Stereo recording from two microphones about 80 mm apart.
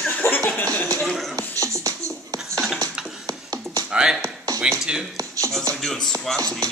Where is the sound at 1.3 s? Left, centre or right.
Right.